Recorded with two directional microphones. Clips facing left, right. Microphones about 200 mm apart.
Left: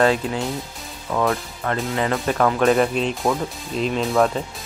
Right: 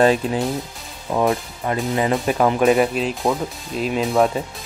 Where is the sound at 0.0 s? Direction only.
20° right (ahead or behind).